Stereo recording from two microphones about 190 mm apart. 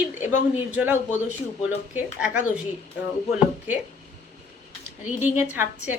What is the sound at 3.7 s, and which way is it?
Speech, 10° right (ahead or behind).